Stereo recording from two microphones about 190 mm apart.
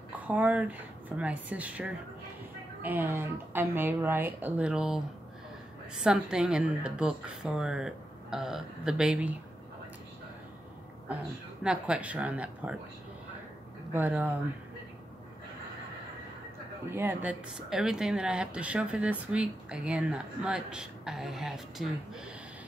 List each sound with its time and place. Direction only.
0.3 s speech: 5° right (ahead or behind)
6.0 s speech: 5° right (ahead or behind)
11.6 s speech: 5° right (ahead or behind)
13.9 s speech: 10° right (ahead or behind)
16.9 s speech: 10° right (ahead or behind)